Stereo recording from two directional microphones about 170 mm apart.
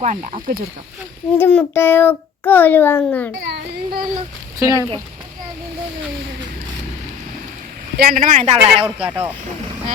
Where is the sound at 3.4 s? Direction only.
75° right (ahead or behind).